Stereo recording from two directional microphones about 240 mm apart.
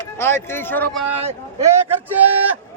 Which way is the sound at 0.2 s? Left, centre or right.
Centre.